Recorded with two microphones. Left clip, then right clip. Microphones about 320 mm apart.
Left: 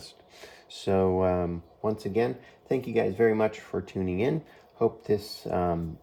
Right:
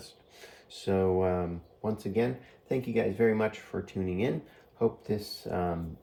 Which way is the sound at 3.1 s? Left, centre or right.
Left.